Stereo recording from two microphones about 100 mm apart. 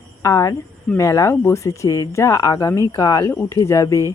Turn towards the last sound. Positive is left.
turn(degrees=30)  # may be behind; listen again after turning